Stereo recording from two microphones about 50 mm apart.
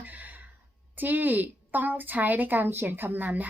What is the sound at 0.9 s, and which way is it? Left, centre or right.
A woman's voice, right.